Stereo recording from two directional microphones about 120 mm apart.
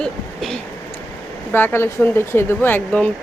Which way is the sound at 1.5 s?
15° left (ahead or behind).